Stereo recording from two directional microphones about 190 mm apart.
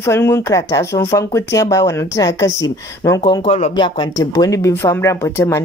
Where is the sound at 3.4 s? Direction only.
35° left (ahead or behind).